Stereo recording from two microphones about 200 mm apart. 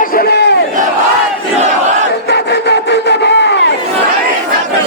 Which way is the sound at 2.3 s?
55° left (ahead or behind).